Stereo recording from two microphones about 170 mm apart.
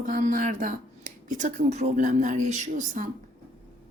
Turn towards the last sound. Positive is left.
turn(degrees=-45)  # may be behind; listen again after turning